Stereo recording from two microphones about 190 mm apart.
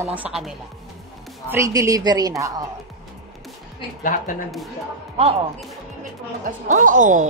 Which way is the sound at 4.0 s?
45° left (ahead or behind).